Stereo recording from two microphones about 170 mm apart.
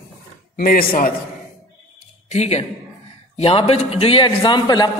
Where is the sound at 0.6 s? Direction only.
55° left (ahead or behind).